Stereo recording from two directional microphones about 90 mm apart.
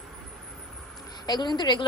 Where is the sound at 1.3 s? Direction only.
55° left (ahead or behind).